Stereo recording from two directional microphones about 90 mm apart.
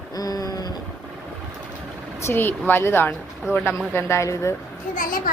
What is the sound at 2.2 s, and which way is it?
Speech, 25° left (ahead or behind).